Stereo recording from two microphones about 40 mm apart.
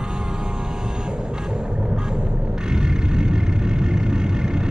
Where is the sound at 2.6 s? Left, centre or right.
Centre.